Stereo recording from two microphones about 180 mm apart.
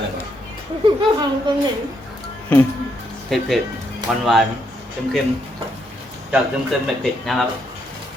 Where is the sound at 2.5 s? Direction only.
10° left (ahead or behind).